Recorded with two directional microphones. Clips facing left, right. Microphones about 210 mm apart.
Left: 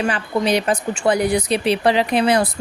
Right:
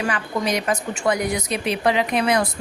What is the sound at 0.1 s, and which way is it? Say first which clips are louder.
A woman's voice: left 4 dB; 30° left (ahead or behind).